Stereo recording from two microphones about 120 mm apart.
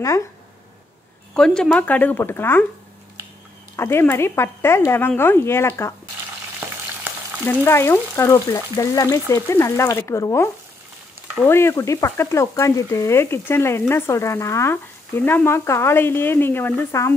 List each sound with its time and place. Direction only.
1.3 s speech: 5° left (ahead or behind)
3.7 s speech: 20° left (ahead or behind)
6.6 s frying: 15° right (ahead or behind)
7.6 s speech: 20° left (ahead or behind)